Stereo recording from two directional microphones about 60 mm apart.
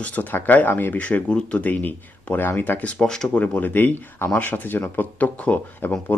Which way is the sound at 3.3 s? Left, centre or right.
Left.